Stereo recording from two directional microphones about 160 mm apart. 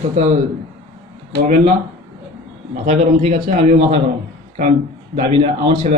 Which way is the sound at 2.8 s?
45° right (ahead or behind).